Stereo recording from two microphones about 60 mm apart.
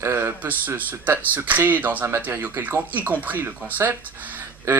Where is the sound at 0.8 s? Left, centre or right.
Right.